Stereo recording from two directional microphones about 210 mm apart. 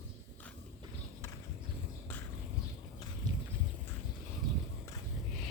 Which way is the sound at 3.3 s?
20° right (ahead or behind).